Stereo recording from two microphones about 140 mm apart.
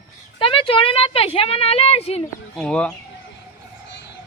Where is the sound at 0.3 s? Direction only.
40° left (ahead or behind).